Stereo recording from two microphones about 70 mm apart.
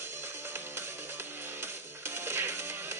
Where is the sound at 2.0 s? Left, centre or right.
Right.